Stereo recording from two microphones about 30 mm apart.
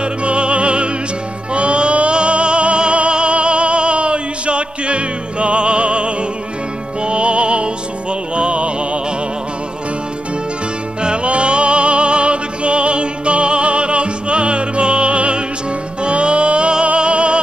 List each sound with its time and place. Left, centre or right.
0.0 s music: right
11.0 s music: right